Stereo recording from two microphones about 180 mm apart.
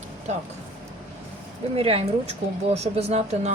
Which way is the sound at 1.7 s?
30° right (ahead or behind).